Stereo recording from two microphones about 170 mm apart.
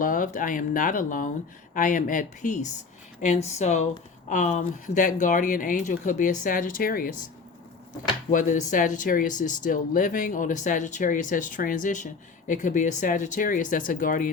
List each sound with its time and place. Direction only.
0.0 s speech: 50° left (ahead or behind)
8.3 s speech: 50° left (ahead or behind)